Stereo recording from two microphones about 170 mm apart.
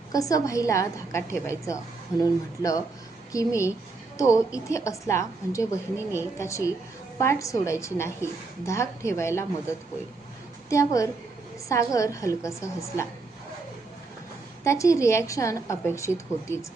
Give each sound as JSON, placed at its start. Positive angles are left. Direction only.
{"t": 0.1, "sound": "a woman's voice", "side_deg": 20}
{"t": 10.7, "sound": "a woman's voice", "side_deg": 20}
{"t": 14.6, "sound": "a woman's voice", "side_deg": 15}